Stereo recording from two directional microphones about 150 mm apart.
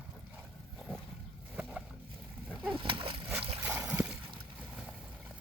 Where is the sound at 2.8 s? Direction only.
35° right (ahead or behind).